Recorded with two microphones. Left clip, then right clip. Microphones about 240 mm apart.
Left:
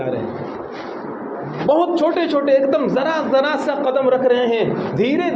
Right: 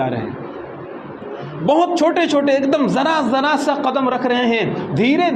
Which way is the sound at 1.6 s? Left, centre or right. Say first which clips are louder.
Right 1 dB; right.